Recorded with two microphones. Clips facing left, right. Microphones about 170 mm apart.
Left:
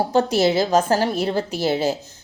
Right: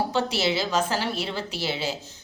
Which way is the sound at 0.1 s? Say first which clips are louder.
Left 7 dB; 45° left (ahead or behind).